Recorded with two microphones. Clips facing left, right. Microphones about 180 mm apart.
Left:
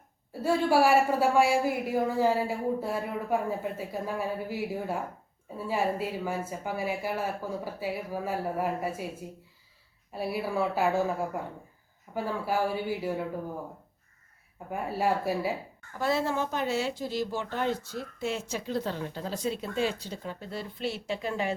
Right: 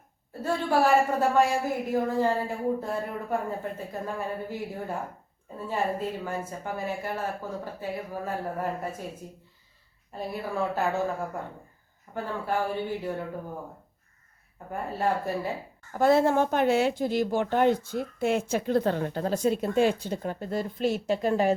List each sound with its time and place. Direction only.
0.4 s a woman's voice: 10° left (ahead or behind)
10.1 s a woman's voice: 10° left (ahead or behind)
14.7 s a woman's voice: 10° left (ahead or behind)
15.9 s a woman's voice: 50° right (ahead or behind)